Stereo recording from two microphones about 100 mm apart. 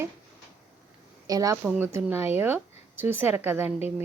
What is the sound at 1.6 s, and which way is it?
A woman's voice, 15° right (ahead or behind).